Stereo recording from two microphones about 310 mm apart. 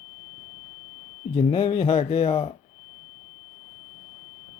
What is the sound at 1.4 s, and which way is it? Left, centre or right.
A man's voice, centre.